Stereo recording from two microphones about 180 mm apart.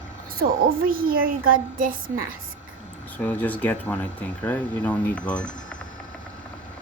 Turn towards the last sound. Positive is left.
turn(degrees=5)  # may be behind; listen again after turning